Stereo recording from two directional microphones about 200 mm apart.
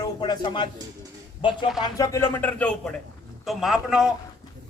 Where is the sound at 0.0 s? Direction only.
20° left (ahead or behind).